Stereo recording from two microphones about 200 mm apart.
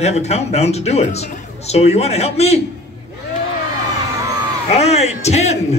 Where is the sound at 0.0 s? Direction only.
35° left (ahead or behind).